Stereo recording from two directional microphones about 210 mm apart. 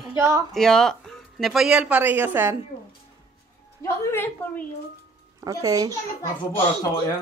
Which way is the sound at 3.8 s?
10° left (ahead or behind).